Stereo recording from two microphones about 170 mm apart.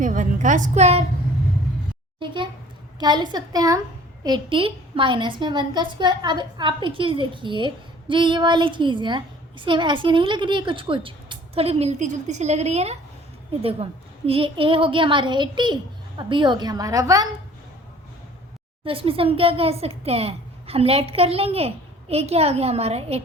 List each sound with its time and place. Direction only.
0.0 s a woman's voice: 50° right (ahead or behind)
2.1 s a child's voice: 30° right (ahead or behind)
18.9 s a child's voice: 35° right (ahead or behind)